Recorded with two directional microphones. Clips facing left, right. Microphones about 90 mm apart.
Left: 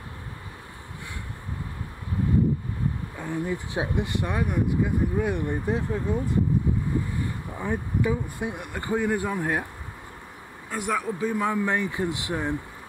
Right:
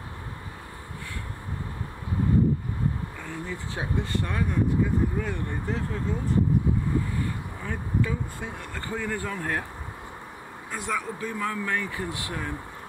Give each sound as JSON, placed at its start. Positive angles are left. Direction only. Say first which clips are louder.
{"t": 3.2, "sound": "speech", "louder": "left 6 dB", "side_deg": 15}
{"t": 7.6, "sound": "speech", "louder": "left 3 dB", "side_deg": 15}
{"t": 10.7, "sound": "speech", "louder": "left 3 dB", "side_deg": 10}